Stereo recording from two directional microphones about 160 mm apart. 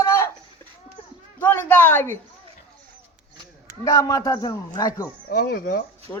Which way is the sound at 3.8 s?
20° left (ahead or behind).